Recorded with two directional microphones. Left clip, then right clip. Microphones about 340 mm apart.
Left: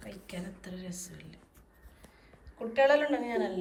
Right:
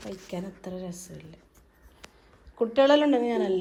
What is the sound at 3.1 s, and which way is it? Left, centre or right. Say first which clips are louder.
Speech: right 6 dB; centre.